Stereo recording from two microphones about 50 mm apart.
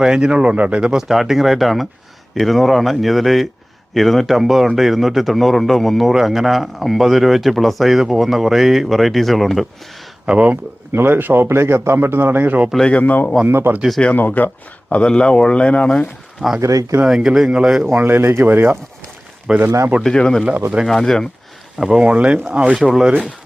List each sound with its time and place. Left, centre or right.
0.0 s a man's voice: centre
10.2 s speech: right
10.9 s a man's voice: right
12.9 s speech: left
13.5 s a man's voice: right
14.1 s speech: left
16.6 s speech: right
17.5 s speech: centre
17.9 s a man's voice: right
19.6 s speech: right
20.1 s speech: centre
21.8 s speech: centre
22.0 s speech: right
22.8 s speech: centre